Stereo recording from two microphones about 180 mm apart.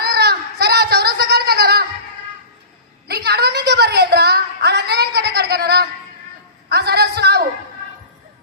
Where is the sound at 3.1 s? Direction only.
60° right (ahead or behind).